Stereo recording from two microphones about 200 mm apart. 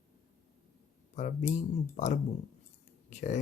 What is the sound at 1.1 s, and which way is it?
Speech, 35° left (ahead or behind).